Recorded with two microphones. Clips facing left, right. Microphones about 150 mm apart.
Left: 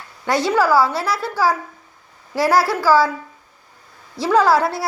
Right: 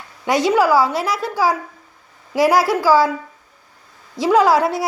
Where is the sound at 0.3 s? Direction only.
15° right (ahead or behind).